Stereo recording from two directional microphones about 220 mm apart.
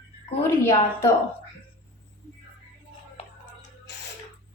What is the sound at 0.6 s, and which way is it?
Speech, 10° left (ahead or behind).